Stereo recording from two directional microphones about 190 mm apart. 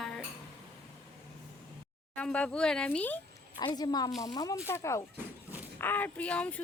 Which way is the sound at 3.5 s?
20° left (ahead or behind).